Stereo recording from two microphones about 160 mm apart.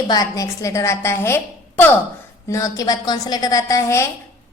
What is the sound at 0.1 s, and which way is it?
A woman's voice, 20° left (ahead or behind).